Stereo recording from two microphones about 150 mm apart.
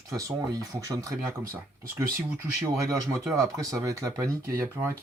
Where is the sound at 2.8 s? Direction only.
20° right (ahead or behind).